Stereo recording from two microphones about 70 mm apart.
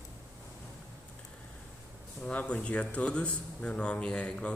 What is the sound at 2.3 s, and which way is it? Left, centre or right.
Speech, centre.